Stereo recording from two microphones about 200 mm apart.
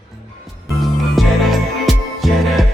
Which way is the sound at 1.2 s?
Centre (ahead or behind).